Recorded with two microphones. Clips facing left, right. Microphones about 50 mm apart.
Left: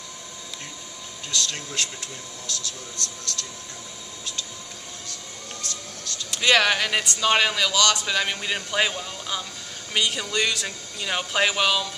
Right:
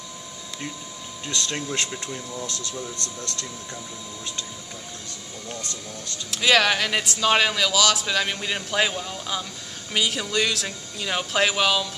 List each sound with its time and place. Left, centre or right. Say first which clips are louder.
1.3 s speech: right 2 dB; right
6.3 s a man's voice: even; centre